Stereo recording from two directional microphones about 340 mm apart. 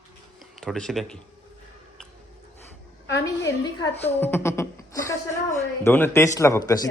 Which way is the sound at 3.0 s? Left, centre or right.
Left.